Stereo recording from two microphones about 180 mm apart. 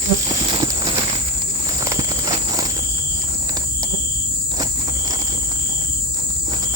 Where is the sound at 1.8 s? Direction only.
15° right (ahead or behind).